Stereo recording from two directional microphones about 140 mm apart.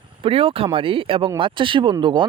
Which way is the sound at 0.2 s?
40° right (ahead or behind).